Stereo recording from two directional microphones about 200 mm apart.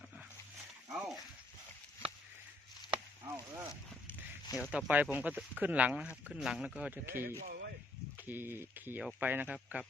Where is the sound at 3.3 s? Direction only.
15° right (ahead or behind).